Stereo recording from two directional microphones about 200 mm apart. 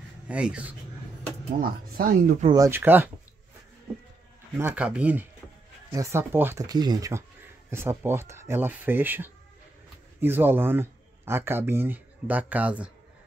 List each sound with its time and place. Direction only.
0.3 s speech: 5° right (ahead or behind)
1.6 s speech: 45° right (ahead or behind)
2.4 s speech: 15° right (ahead or behind)
4.6 s speech: 10° right (ahead or behind)